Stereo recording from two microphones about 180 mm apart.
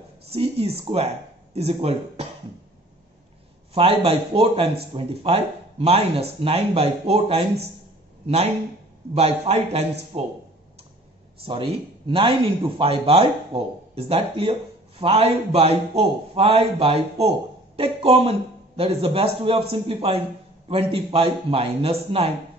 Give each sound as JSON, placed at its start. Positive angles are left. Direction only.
{"t": 0.3, "sound": "speech", "side_deg": -35}
{"t": 3.7, "sound": "speech", "side_deg": -30}
{"t": 11.4, "sound": "speech", "side_deg": -30}